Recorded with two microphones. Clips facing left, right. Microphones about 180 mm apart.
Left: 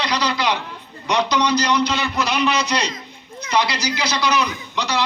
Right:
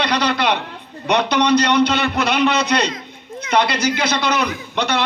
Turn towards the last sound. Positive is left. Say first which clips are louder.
# right 4 dB
turn(degrees=-55)  # may be behind; listen again after turning